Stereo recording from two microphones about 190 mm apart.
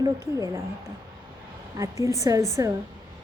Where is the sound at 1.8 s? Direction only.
15° right (ahead or behind).